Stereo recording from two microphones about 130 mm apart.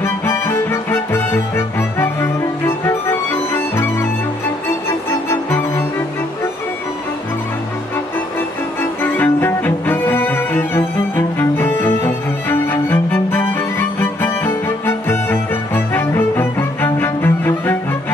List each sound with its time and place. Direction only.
0.0 s music: 20° left (ahead or behind)
2.6 s music: 20° left (ahead or behind)
9.0 s cello: 15° left (ahead or behind)